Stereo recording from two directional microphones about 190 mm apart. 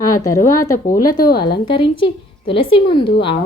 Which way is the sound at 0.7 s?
45° left (ahead or behind).